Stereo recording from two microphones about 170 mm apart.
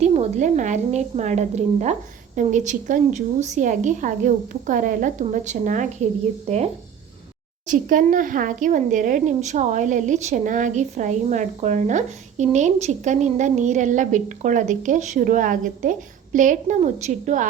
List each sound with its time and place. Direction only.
0.0 s a woman's voice: 40° right (ahead or behind)
6.5 s speech: 40° right (ahead or behind)
7.7 s a woman's voice: 50° right (ahead or behind)